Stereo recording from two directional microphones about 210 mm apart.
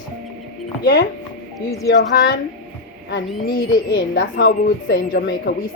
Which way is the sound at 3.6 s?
20° left (ahead or behind).